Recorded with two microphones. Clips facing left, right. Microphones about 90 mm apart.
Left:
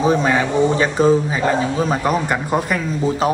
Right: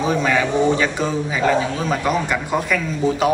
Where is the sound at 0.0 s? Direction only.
35° left (ahead or behind).